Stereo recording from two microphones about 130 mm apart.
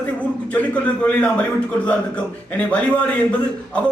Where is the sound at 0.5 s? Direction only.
10° left (ahead or behind).